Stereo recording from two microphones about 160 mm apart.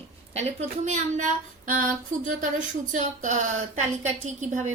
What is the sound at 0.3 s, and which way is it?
Speech, 45° right (ahead or behind).